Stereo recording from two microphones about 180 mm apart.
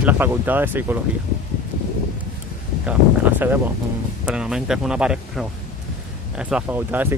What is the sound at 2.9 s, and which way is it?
Speech, 10° right (ahead or behind).